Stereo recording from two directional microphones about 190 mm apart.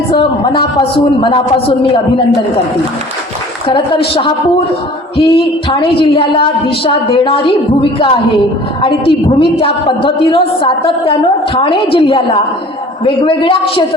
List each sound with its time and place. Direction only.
0.1 s a woman's voice: 30° left (ahead or behind)
3.7 s a woman's voice: 30° left (ahead or behind)